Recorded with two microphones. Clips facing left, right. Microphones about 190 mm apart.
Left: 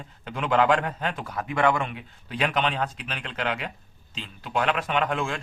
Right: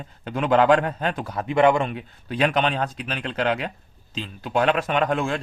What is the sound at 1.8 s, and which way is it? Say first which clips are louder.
A man's voice: right 5 dB; 40° right (ahead or behind).